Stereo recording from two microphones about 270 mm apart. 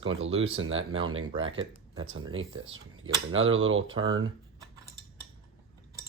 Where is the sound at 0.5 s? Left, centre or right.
Right.